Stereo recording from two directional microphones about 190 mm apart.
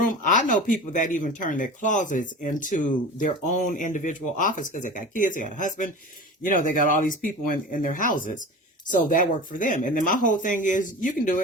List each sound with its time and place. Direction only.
0.0 s speech: 45° left (ahead or behind)